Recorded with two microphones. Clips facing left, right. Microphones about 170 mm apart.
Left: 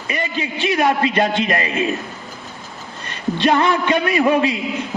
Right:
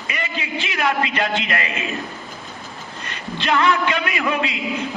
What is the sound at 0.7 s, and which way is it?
Speech, 35° left (ahead or behind).